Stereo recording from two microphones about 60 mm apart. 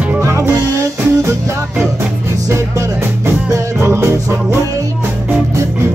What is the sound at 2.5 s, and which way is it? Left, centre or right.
Music, right.